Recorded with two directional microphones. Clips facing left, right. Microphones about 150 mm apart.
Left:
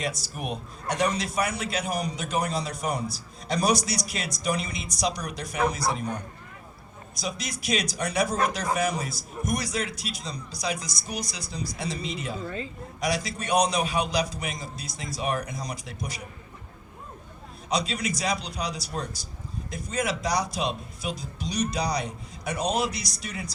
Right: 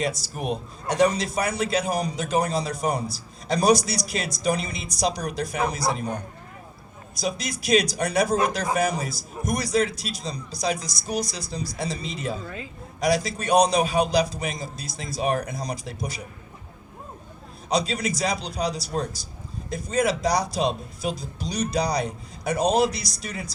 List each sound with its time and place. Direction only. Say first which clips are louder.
0.0 s a man's voice: right 4 dB; 35° right (ahead or behind)
7.6 s a man's voice: right 7 dB; 35° right (ahead or behind)
17.7 s a man's voice: right 3 dB; 35° right (ahead or behind)